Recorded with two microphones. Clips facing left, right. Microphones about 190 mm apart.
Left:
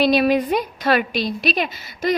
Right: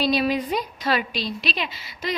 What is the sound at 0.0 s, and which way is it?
A woman's voice, 60° left (ahead or behind).